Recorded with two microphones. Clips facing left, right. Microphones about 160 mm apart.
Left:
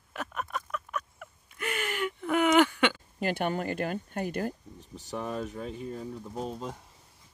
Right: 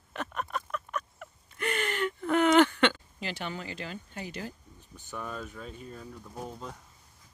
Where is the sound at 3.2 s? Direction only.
50° left (ahead or behind).